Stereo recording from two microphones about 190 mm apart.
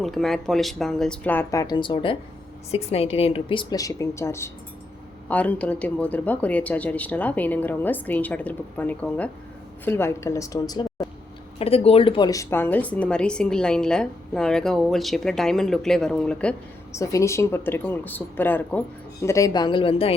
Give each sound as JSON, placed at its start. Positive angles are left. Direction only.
{"t": 0.0, "sound": "a woman's voice", "side_deg": 0}
{"t": 11.6, "sound": "speech", "side_deg": 30}
{"t": 17.0, "sound": "a woman's voice", "side_deg": 15}